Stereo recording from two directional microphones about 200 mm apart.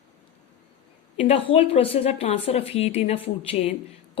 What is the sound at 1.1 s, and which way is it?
A woman's voice, 30° left (ahead or behind).